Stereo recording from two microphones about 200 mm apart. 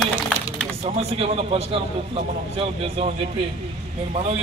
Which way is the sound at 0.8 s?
30° right (ahead or behind).